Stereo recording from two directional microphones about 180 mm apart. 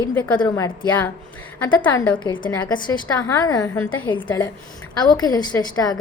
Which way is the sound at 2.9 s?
20° left (ahead or behind).